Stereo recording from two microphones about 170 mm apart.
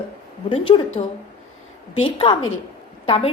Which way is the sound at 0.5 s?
30° left (ahead or behind).